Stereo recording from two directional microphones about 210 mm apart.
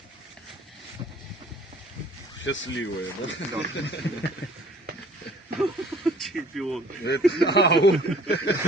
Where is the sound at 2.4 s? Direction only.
60° left (ahead or behind).